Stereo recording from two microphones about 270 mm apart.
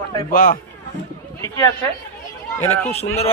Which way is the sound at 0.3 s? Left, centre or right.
Left.